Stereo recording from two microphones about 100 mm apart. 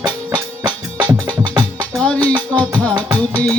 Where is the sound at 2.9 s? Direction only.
45° right (ahead or behind).